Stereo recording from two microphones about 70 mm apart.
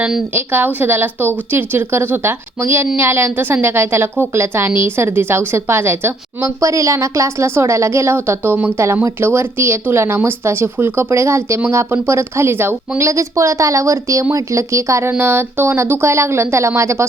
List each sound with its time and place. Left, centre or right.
0.3 s a woman's voice: right
6.4 s a woman's voice: right
13.1 s a woman's voice: right
15.2 s a woman's voice: right